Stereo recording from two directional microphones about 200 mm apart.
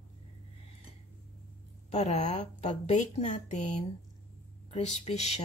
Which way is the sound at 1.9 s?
35° left (ahead or behind).